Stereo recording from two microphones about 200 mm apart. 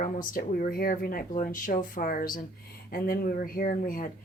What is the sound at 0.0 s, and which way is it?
Speech, 40° left (ahead or behind).